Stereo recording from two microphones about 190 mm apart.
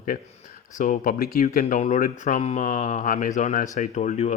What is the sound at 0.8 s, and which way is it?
Speech, 45° left (ahead or behind).